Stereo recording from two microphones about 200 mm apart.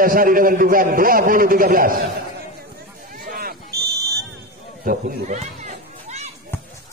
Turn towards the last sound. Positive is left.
turn(degrees=-35)  # may be behind; listen again after turning